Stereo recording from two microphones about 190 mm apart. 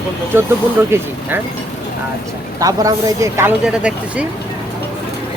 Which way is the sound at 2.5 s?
15° right (ahead or behind).